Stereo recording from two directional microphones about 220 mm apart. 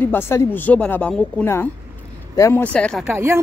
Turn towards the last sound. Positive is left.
turn(degrees=-10)  # may be behind; listen again after turning